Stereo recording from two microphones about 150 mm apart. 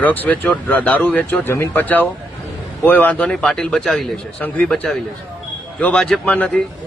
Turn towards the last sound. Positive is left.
turn(degrees=10)  # may be behind; listen again after turning